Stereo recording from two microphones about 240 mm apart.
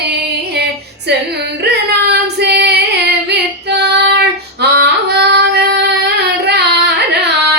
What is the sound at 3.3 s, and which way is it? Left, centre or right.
Female singing, right.